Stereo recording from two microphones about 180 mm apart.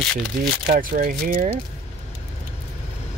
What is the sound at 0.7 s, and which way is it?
Speech, 55° right (ahead or behind).